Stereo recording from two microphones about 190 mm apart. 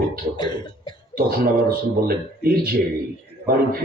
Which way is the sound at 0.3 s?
20° left (ahead or behind).